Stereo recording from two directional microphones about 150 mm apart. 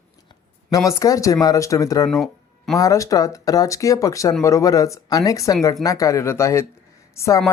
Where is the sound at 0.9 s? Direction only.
20° left (ahead or behind).